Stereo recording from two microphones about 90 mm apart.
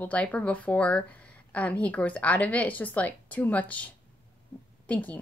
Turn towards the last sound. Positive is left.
turn(degrees=15)  # may be behind; listen again after turning